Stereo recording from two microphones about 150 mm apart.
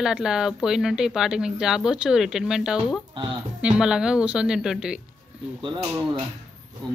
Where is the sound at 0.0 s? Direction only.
5° right (ahead or behind).